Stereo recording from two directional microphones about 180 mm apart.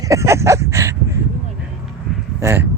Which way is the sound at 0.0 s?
15° right (ahead or behind).